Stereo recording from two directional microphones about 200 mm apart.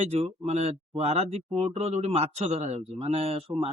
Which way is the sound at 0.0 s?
30° right (ahead or behind).